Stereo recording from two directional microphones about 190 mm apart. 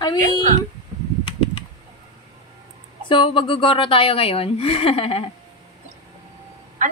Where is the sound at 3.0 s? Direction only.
25° left (ahead or behind).